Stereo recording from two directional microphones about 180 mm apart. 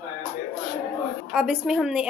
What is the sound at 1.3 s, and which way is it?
Speech, 5° right (ahead or behind).